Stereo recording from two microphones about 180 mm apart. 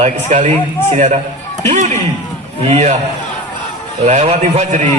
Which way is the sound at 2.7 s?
35° right (ahead or behind).